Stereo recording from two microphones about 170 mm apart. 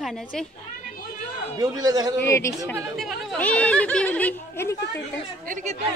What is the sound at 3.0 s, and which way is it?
Speech, 5° left (ahead or behind).